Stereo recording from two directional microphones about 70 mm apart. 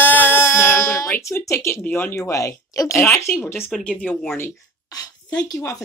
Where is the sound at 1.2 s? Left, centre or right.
Left.